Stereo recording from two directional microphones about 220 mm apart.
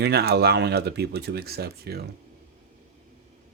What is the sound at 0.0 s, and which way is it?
Speech, 45° right (ahead or behind).